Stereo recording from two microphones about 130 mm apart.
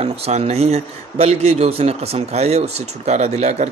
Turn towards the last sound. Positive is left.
turn(degrees=-60)  # may be behind; listen again after turning